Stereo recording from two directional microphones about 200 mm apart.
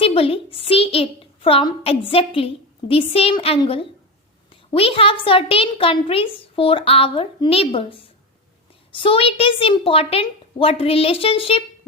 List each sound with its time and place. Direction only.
0.0 s a woman's voice: 30° left (ahead or behind)